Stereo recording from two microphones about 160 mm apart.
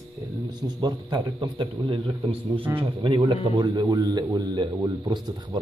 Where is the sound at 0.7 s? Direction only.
25° right (ahead or behind).